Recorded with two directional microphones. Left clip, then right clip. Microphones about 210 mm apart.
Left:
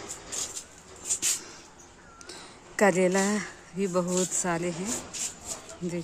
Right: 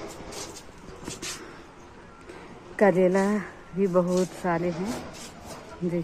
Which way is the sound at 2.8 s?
30° left (ahead or behind).